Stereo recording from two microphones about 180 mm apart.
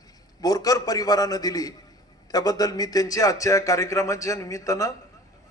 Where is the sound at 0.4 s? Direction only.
20° left (ahead or behind).